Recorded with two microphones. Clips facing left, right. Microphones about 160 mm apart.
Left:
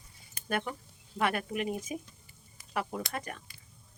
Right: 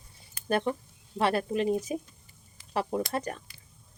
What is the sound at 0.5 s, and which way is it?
Speech, 25° right (ahead or behind).